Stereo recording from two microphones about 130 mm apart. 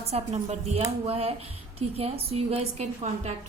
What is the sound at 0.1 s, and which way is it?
A woman's voice, 55° right (ahead or behind).